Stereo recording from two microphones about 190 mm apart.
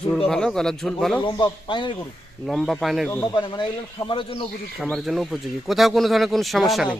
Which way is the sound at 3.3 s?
25° left (ahead or behind).